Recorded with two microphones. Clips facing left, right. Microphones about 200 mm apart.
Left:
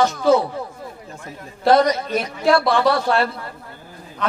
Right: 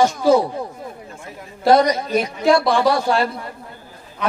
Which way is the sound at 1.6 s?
10° right (ahead or behind).